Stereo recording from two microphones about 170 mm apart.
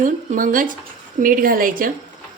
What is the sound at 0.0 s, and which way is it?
A woman's voice, 50° right (ahead or behind).